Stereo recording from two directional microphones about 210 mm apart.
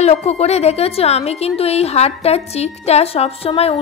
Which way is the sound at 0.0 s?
30° left (ahead or behind).